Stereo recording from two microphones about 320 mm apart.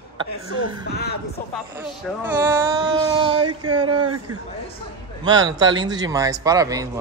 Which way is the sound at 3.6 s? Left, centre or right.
Right.